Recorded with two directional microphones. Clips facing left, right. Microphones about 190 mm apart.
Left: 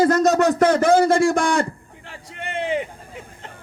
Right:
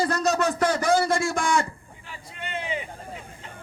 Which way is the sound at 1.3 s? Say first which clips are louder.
Left 5 dB; 60° left (ahead or behind).